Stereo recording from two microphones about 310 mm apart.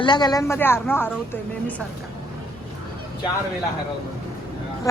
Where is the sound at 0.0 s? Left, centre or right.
Centre.